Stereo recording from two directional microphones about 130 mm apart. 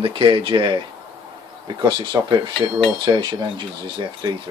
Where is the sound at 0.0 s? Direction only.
45° right (ahead or behind).